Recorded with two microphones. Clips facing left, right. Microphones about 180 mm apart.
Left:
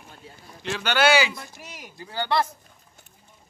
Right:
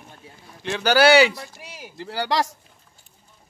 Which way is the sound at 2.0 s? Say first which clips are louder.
Right 1 dB; 80° right.